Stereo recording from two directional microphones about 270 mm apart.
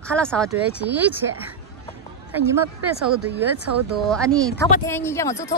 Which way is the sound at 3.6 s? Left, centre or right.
Right.